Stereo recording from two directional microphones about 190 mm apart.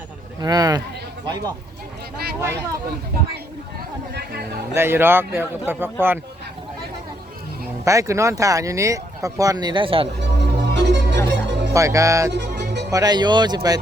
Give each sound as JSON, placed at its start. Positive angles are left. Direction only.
{"t": 0.3, "sound": "speech", "side_deg": -20}
{"t": 2.4, "sound": "speech", "side_deg": -15}
{"t": 4.7, "sound": "speech", "side_deg": -10}
{"t": 7.9, "sound": "speech", "side_deg": -15}
{"t": 10.2, "sound": "music", "side_deg": -65}
{"t": 11.7, "sound": "speech", "side_deg": -15}
{"t": 12.3, "sound": "music", "side_deg": -65}
{"t": 12.9, "sound": "speech", "side_deg": -20}